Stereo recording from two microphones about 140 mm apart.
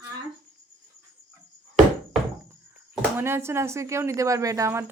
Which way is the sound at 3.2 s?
20° right (ahead or behind).